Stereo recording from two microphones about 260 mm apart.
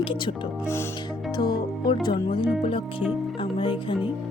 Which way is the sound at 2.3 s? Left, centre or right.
Centre.